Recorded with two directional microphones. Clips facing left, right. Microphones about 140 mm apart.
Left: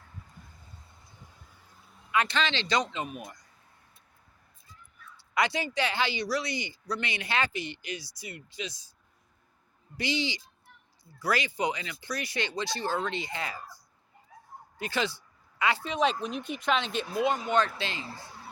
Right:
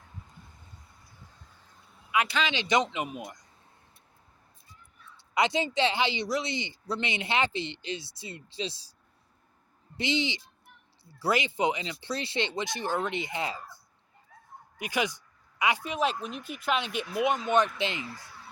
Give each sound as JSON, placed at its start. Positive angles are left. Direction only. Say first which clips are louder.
{"t": 0.8, "sound": "a sound", "louder": "left 1 dB", "side_deg": 25}
{"t": 1.9, "sound": "speech", "louder": "even", "side_deg": -10}
{"t": 5.0, "sound": "speech", "louder": "right 2 dB", "side_deg": -20}
{"t": 10.0, "sound": "speech", "louder": "right 2 dB", "side_deg": -20}
{"t": 14.8, "sound": "speech", "louder": "right 1 dB", "side_deg": -15}
{"t": 18.0, "sound": "speech", "louder": "even", "side_deg": 25}